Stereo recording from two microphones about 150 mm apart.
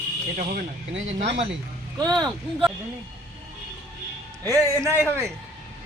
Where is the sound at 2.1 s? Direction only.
30° right (ahead or behind).